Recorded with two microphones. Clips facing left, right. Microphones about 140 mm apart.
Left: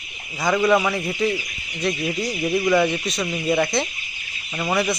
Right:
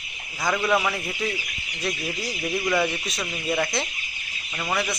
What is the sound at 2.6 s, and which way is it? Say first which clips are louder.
Speech: left 5 dB; centre (ahead or behind).